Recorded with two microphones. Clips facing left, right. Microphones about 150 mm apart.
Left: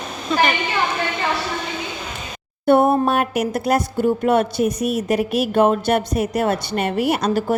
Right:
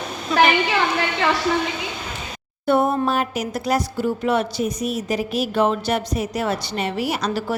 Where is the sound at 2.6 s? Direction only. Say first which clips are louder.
Left 4 dB; 55° left (ahead or behind).